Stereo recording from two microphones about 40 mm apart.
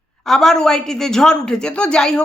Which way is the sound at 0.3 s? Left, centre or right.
Centre.